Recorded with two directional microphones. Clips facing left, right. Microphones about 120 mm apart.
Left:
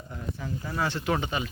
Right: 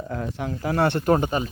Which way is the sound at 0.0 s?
90° right.